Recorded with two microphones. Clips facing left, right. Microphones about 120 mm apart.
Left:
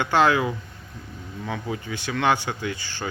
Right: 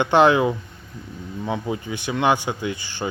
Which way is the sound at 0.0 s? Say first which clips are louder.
Right 4 dB; 20° right (ahead or behind).